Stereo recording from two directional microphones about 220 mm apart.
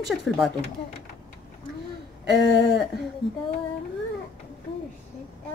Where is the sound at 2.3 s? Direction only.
60° left (ahead or behind).